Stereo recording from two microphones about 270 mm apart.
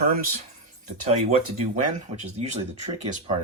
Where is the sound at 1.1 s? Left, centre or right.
Right.